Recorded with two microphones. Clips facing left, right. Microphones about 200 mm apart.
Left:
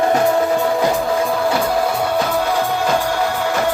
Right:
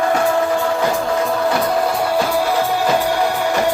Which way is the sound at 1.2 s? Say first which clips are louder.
Even; centre (ahead or behind).